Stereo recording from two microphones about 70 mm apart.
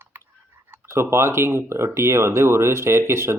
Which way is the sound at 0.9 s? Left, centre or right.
Right.